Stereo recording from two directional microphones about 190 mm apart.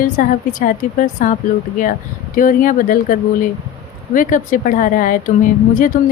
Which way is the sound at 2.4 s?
45° left (ahead or behind).